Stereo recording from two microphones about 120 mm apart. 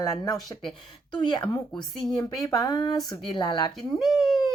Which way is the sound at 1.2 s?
40° left (ahead or behind).